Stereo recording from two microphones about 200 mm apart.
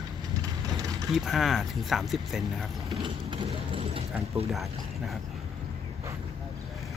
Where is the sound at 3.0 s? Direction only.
25° right (ahead or behind).